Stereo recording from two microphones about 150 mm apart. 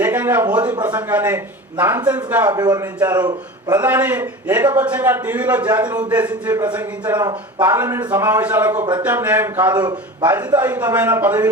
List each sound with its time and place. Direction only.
0.0 s a man's voice: 10° right (ahead or behind)
2.5 s speech: 25° right (ahead or behind)
3.8 s a man's voice: 10° right (ahead or behind)